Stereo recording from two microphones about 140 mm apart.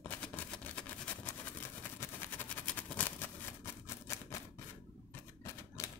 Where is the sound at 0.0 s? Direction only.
10° left (ahead or behind).